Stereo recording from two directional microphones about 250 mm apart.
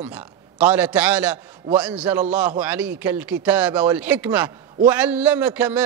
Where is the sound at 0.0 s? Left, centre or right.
Centre.